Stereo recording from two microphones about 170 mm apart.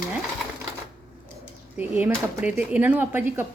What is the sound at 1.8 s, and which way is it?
Speech, 10° right (ahead or behind).